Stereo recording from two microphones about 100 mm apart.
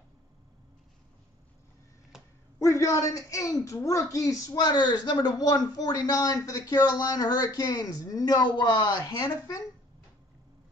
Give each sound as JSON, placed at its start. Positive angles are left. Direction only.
{"t": 2.1, "sound": "a sound", "side_deg": -5}
{"t": 2.6, "sound": "a woman's voice", "side_deg": 30}
{"t": 9.2, "sound": "a woman's voice", "side_deg": 35}